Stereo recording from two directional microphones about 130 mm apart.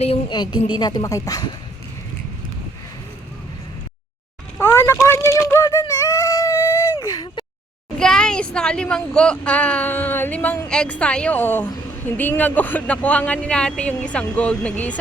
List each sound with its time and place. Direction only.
0.3 s a woman's voice: 35° left (ahead or behind)
4.6 s a sound: 20° left (ahead or behind)
5.8 s whimper: 25° left (ahead or behind)
7.9 s speech: 5° left (ahead or behind)